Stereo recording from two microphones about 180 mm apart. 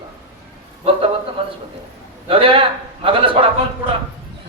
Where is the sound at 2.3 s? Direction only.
30° right (ahead or behind).